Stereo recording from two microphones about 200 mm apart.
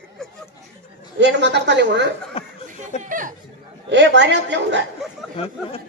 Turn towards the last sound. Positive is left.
turn(degrees=30)  # may be behind; listen again after turning